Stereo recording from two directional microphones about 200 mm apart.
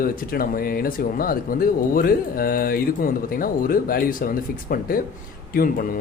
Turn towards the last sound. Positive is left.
turn(degrees=45)  # may be behind; listen again after turning